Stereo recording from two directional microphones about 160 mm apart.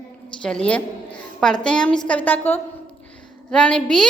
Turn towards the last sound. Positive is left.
turn(degrees=5)  # may be behind; listen again after turning